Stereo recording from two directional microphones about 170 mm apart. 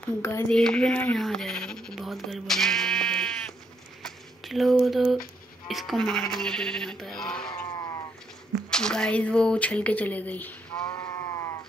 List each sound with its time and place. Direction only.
0.2 s speech: 15° left (ahead or behind)
0.5 s speech: 5° left (ahead or behind)
4.0 s a sound: centre (ahead or behind)
5.7 s sheep: centre (ahead or behind)
7.6 s a sound: 20° left (ahead or behind)
8.6 s speech: 5° left (ahead or behind)
10.7 s sheep: 25° left (ahead or behind)